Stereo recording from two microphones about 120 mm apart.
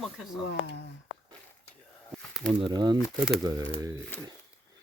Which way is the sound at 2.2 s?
Centre (ahead or behind).